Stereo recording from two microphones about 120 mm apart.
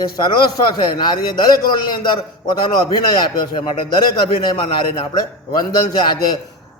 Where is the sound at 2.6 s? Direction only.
35° left (ahead or behind).